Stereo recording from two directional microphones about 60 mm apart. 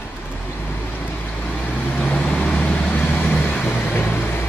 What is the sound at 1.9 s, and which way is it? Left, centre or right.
Vehicle, left.